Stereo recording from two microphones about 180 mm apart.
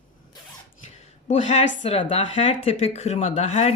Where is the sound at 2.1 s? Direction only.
30° left (ahead or behind).